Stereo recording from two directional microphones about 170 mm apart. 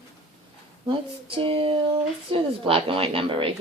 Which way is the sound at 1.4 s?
30° right (ahead or behind).